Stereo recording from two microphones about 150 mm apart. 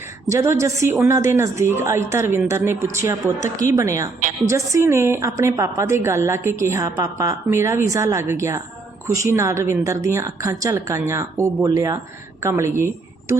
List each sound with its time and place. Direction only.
0.3 s a woman's voice: 20° right (ahead or behind)